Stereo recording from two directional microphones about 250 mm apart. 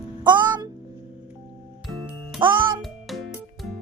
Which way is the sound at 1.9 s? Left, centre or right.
Centre.